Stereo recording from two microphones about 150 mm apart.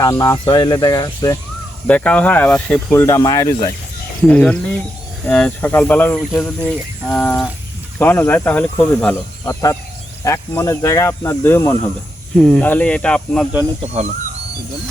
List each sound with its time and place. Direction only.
0.0 s speech: 20° left (ahead or behind)
1.9 s speech: 10° left (ahead or behind)
4.3 s speech: 5° left (ahead or behind)
12.4 s speech: centre (ahead or behind)
13.8 s speech: 45° right (ahead or behind)